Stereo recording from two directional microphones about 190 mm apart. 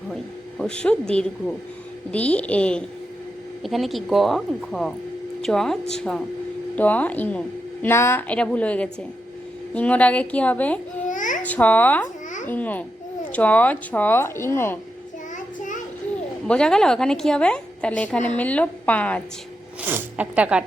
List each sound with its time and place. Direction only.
0.6 s a woman's voice: 5° left (ahead or behind)
11.1 s babbling: 45° left (ahead or behind)
11.4 s a woman's voice: 10° left (ahead or behind)
16.5 s a woman's voice: 5° left (ahead or behind)
19.8 s speech: 10° right (ahead or behind)